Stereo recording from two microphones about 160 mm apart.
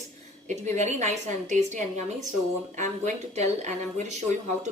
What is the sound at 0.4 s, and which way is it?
A woman's voice, 45° right (ahead or behind).